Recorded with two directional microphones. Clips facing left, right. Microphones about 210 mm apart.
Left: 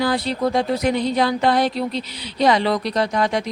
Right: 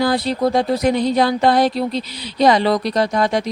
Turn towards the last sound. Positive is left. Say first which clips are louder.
# right 3 dB
turn(degrees=-35)  # may be behind; listen again after turning